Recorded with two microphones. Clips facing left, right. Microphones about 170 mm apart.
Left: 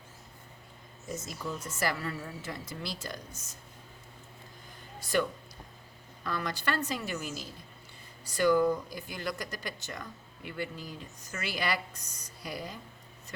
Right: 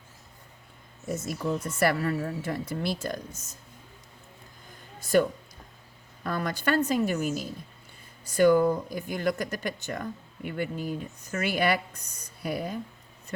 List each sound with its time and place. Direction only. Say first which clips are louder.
1.0 s speech: right 8 dB; 60° right (ahead or behind)
4.9 s a sound: right 7 dB; 45° right (ahead or behind)
6.2 s speech: right 5 dB; 50° right (ahead or behind)